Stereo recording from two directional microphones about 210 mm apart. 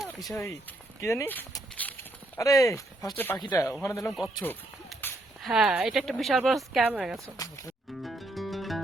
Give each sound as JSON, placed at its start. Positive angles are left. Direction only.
{"t": 0.0, "sound": "a sound", "side_deg": 0}
{"t": 1.0, "sound": "speech", "side_deg": 10}
{"t": 3.3, "sound": "speech", "side_deg": 20}
{"t": 4.1, "sound": "speech", "side_deg": 0}
{"t": 4.4, "sound": "a sound", "side_deg": 10}
{"t": 5.5, "sound": "speech", "side_deg": 0}
{"t": 7.3, "sound": "speech", "side_deg": 15}
{"t": 8.0, "sound": "music", "side_deg": 0}